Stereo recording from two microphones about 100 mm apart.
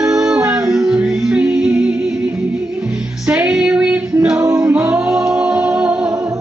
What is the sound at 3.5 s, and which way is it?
Female singing, 5° right (ahead or behind).